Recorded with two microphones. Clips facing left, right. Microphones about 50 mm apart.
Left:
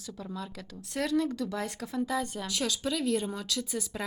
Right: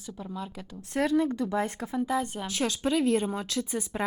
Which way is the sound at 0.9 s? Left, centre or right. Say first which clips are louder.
Right 4 dB; right.